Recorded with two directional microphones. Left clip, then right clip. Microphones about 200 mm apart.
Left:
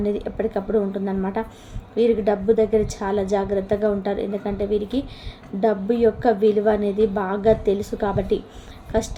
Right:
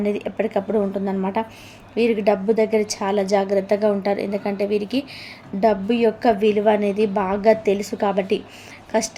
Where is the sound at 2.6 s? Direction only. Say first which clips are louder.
Even; 20° right (ahead or behind).